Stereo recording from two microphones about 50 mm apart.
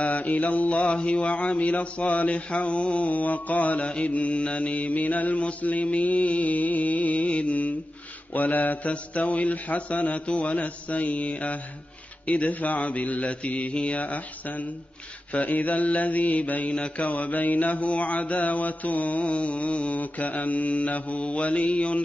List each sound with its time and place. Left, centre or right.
0.0 s mantra: left